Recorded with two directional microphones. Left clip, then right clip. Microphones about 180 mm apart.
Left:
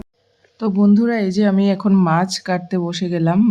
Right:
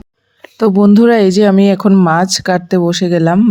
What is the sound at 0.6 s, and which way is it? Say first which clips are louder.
Speech: right 8 dB; 45° right (ahead or behind).